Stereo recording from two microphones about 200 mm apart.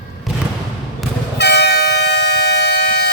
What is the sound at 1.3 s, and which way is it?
Train, 55° left (ahead or behind).